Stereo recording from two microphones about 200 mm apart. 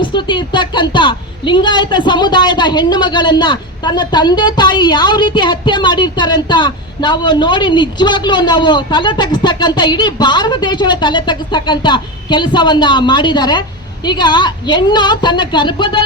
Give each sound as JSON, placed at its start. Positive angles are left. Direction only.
{"t": 0.0, "sound": "a woman's voice", "side_deg": 25}